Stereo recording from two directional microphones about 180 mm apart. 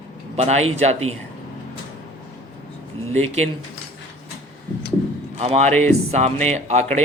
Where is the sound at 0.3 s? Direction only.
40° right (ahead or behind).